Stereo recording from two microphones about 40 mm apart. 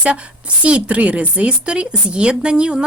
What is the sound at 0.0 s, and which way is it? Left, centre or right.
A woman's voice, right.